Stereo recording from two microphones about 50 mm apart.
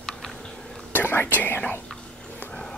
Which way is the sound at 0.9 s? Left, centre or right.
Left.